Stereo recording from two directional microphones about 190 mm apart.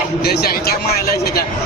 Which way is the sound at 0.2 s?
55° left (ahead or behind).